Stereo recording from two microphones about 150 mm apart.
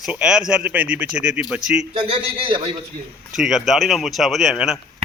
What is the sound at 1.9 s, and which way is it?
Speech, 35° right (ahead or behind).